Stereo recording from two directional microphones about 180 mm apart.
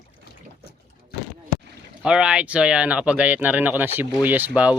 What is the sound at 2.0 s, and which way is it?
Speech, 5° right (ahead or behind).